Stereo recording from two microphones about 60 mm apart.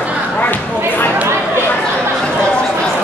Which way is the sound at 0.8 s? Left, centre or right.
Left.